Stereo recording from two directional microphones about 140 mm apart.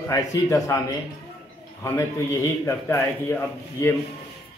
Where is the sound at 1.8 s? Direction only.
20° left (ahead or behind).